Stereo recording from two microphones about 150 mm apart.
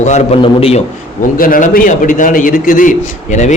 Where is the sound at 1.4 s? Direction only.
65° left (ahead or behind).